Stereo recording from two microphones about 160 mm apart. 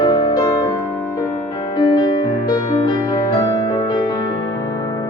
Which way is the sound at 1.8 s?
25° left (ahead or behind).